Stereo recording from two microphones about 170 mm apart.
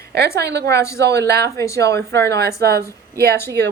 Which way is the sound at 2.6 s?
70° right (ahead or behind).